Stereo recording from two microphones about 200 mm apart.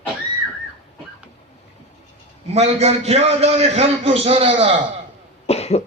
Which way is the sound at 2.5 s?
30° right (ahead or behind).